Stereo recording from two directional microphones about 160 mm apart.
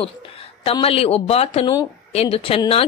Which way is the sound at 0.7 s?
35° left (ahead or behind).